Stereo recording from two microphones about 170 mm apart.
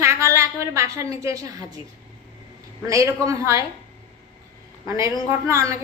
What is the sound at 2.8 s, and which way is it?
Speech, 20° right (ahead or behind).